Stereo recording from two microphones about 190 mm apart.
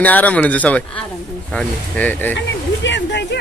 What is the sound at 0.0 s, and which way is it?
Speech, 10° left (ahead or behind).